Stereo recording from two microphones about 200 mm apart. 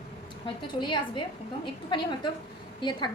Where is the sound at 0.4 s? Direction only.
20° left (ahead or behind).